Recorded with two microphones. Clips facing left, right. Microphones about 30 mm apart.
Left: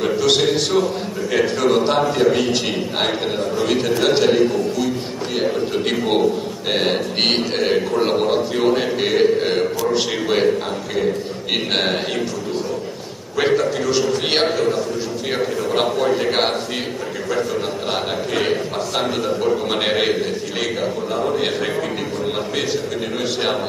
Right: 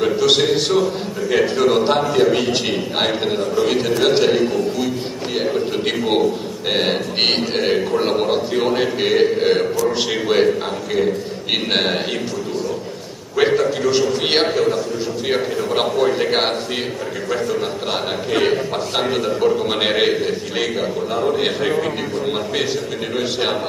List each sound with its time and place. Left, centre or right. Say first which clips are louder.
0.0 s a man's voice: right 1 dB; centre
11.7 s a man's voice: right 1 dB; centre
13.4 s a man's voice: right 2 dB; centre
18.4 s a man's voice: right 2 dB; centre